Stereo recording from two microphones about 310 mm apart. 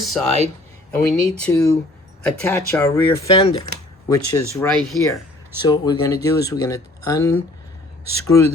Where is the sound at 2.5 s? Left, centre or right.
Centre.